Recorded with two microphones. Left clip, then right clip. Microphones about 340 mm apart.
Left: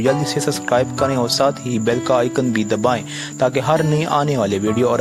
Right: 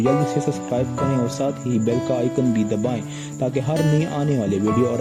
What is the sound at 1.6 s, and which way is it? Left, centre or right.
Speech, centre.